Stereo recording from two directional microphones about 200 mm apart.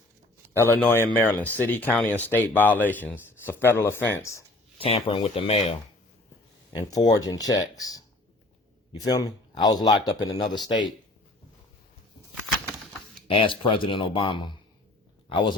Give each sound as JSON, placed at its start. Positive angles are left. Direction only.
{"t": 0.5, "sound": "speech", "side_deg": 10}
{"t": 4.8, "sound": "a man's voice", "side_deg": 30}
{"t": 6.7, "sound": "a man's voice", "side_deg": 20}
{"t": 13.2, "sound": "a man's voice", "side_deg": 25}